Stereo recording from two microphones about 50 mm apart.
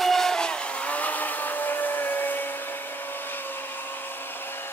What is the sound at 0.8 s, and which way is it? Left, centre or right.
Vehicle, left.